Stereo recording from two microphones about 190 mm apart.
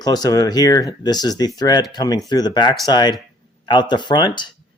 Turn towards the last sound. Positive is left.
turn(degrees=25)  # may be behind; listen again after turning